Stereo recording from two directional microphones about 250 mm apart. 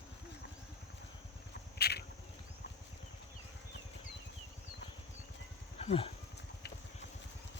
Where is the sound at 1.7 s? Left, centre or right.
Left.